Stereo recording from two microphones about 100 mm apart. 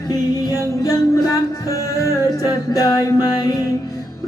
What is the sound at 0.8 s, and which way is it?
Music, 35° left (ahead or behind).